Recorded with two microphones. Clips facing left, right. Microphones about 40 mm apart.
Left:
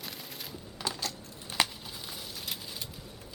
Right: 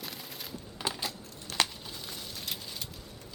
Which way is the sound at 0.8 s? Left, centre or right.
Centre.